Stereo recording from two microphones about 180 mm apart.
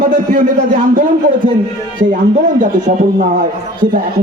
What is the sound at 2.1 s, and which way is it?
A man's voice, 45° right (ahead or behind).